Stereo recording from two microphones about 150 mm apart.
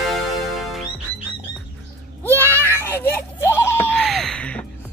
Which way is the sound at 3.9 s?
Centre (ahead or behind).